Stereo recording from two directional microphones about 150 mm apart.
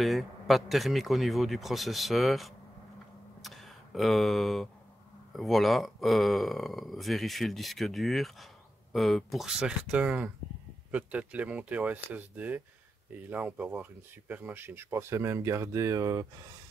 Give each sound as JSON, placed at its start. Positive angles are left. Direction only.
{"t": 0.0, "sound": "speech", "side_deg": 0}
{"t": 3.4, "sound": "a sound", "side_deg": 0}
{"t": 5.3, "sound": "speech", "side_deg": 0}